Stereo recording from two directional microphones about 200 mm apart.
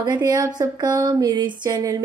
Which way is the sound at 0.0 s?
20° right (ahead or behind).